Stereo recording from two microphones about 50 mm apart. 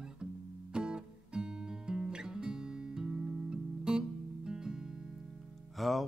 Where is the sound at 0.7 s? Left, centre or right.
Centre.